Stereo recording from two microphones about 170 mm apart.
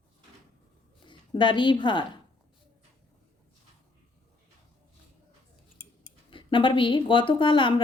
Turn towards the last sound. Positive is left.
turn(degrees=30)  # may be behind; listen again after turning